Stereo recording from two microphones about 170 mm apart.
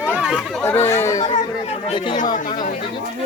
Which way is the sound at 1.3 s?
40° left (ahead or behind).